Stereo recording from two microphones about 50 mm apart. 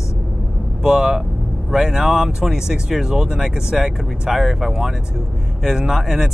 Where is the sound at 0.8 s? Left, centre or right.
Centre.